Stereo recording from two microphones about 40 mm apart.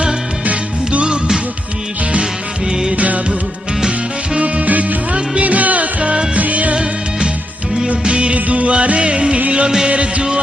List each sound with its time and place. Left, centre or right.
0.9 s music: right
2.9 s music: right
4.4 s music: right
7.9 s music of bollywood: right
9.5 s music: right